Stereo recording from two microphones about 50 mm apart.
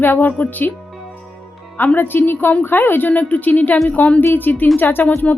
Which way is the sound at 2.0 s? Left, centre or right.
Left.